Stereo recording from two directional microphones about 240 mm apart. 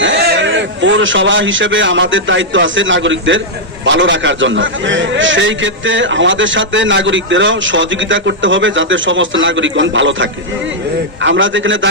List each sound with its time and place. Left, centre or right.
0.0 s a man's voice: right